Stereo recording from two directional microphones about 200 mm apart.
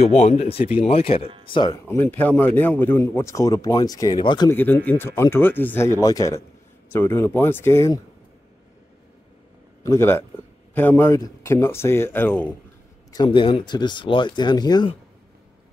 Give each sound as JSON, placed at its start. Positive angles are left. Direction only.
{"t": 0.0, "sound": "speech", "side_deg": 35}
{"t": 2.0, "sound": "speech", "side_deg": 10}
{"t": 4.5, "sound": "speech", "side_deg": 10}
{"t": 9.8, "sound": "speech", "side_deg": 10}
{"t": 13.1, "sound": "speech", "side_deg": 25}